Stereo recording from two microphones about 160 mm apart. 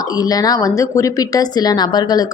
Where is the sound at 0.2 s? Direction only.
25° left (ahead or behind).